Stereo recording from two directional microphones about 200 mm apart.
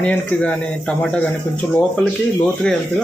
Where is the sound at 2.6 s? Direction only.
5° left (ahead or behind).